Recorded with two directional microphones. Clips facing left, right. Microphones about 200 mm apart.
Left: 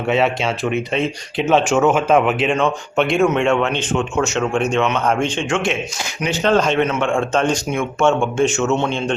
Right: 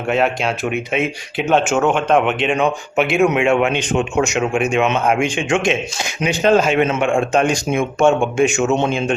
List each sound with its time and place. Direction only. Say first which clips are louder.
0.1 s speech: even; centre (ahead or behind)
6.8 s a man's voice: right 2 dB; 25° right (ahead or behind)
7.1 s speech: right 2 dB; 10° right (ahead or behind)